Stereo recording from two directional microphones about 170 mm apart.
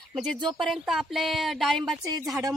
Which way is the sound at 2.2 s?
20° right (ahead or behind).